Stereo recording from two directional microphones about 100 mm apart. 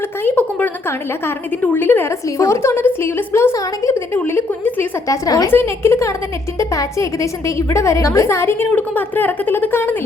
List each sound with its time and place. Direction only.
0.2 s a woman's voice: 20° left (ahead or behind)
4.2 s a woman's voice: 15° left (ahead or behind)
5.0 s a woman's voice: 35° left (ahead or behind)
5.5 s a woman's voice: 25° left (ahead or behind)